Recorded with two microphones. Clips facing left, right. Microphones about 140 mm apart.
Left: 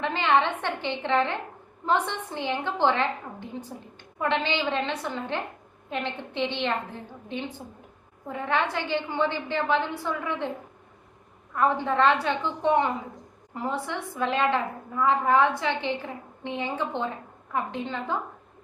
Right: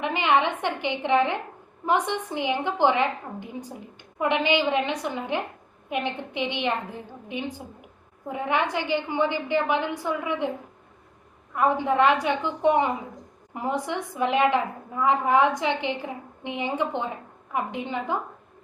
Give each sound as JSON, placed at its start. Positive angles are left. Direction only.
{"t": 0.0, "sound": "a woman's voice", "side_deg": -15}
{"t": 11.5, "sound": "a woman's voice", "side_deg": -15}